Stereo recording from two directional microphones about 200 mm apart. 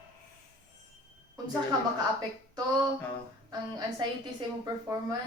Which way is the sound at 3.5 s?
20° right (ahead or behind).